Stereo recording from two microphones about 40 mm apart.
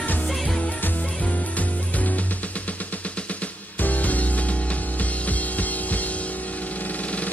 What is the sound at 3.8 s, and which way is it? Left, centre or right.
Music, left.